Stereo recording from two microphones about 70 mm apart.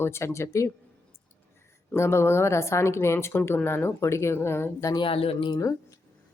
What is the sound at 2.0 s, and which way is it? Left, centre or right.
A woman's voice, left.